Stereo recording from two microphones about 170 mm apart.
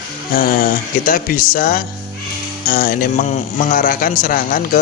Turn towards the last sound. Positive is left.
turn(degrees=55)  # may be behind; listen again after turning